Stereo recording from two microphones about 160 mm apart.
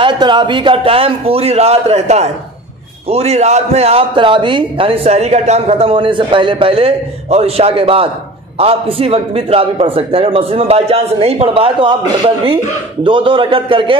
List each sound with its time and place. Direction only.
0.0 s a man's voice: 30° right (ahead or behind)